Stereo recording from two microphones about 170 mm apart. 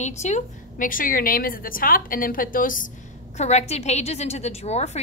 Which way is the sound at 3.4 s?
40° left (ahead or behind).